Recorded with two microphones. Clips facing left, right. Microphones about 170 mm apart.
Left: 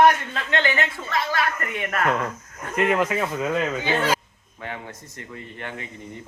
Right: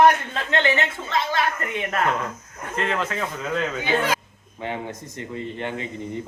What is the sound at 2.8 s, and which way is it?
Speech, 15° left (ahead or behind).